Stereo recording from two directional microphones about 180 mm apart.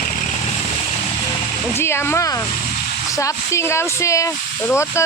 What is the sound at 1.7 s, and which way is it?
Speech, 15° left (ahead or behind).